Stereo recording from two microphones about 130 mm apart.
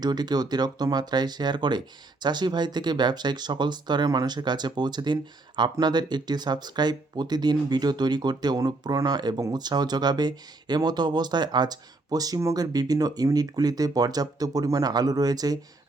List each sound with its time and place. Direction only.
0.0 s speech: 30° right (ahead or behind)